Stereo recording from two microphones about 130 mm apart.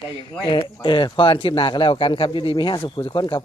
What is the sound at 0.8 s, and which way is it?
Speech, 35° left (ahead or behind).